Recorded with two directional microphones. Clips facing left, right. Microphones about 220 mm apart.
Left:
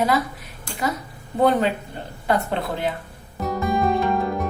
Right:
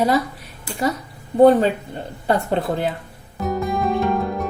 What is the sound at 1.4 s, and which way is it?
Speech, 30° right (ahead or behind).